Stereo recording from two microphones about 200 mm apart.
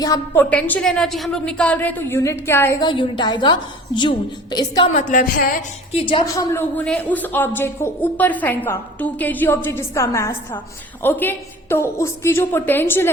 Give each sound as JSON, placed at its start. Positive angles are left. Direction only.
{"t": 0.0, "sound": "a woman's voice", "side_deg": 15}
{"t": 0.5, "sound": "a woman's voice", "side_deg": 5}
{"t": 2.8, "sound": "a woman's voice", "side_deg": 25}
{"t": 4.9, "sound": "a sound", "side_deg": 40}
{"t": 5.9, "sound": "a woman's voice", "side_deg": 25}